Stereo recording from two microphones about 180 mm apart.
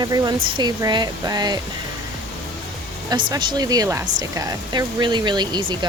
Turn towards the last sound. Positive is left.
turn(degrees=-25)  # may be behind; listen again after turning